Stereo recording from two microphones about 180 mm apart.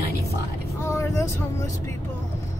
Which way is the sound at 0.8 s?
15° left (ahead or behind).